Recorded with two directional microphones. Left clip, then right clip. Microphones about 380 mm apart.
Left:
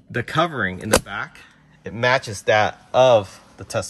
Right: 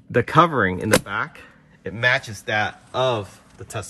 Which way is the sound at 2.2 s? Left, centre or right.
Left.